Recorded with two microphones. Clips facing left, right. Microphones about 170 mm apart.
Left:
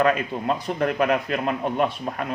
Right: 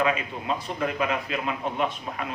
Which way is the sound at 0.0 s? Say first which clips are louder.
Left 5 dB; 50° left (ahead or behind).